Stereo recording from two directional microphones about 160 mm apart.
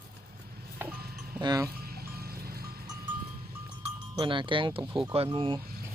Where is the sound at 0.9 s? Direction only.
75° right (ahead or behind).